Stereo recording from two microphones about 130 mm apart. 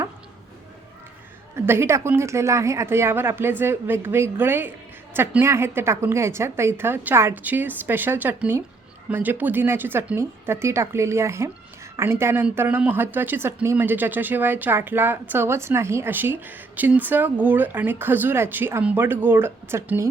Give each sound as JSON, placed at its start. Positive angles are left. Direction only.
{"t": 1.6, "sound": "speech", "side_deg": -20}